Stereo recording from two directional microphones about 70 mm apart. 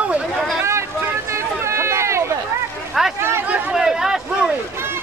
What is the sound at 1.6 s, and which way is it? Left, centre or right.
Run, right.